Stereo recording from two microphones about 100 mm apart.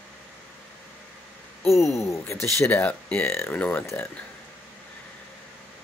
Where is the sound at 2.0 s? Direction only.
30° left (ahead or behind).